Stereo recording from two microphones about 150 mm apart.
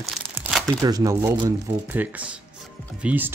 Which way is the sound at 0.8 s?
25° right (ahead or behind).